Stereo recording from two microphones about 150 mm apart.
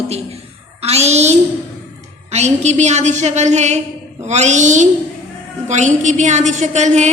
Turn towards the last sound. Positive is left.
turn(degrees=-50)  # may be behind; listen again after turning